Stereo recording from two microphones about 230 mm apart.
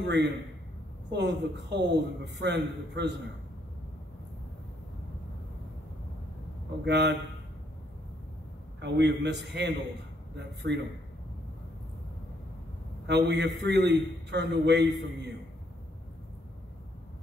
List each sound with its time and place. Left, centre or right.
0.0 s a man's voice: right
6.8 s a man's voice: right
8.8 s a man's voice: right
13.0 s a man's voice: right